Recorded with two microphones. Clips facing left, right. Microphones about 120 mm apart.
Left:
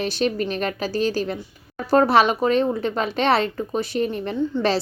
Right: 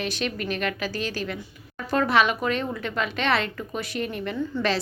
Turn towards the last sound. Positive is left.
turn(degrees=30)  # may be behind; listen again after turning